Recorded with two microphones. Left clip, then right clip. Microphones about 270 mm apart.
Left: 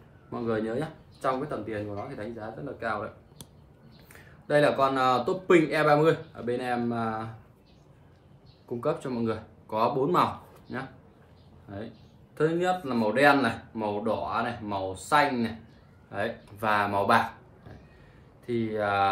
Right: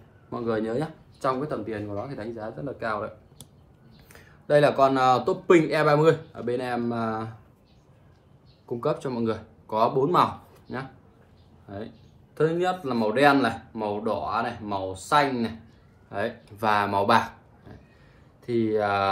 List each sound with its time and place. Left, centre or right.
0.3 s speech: centre
4.1 s speech: centre
8.6 s speech: centre
12.4 s speech: centre
18.4 s speech: centre